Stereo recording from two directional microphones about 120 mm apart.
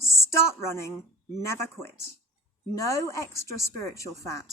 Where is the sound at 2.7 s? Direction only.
25° left (ahead or behind).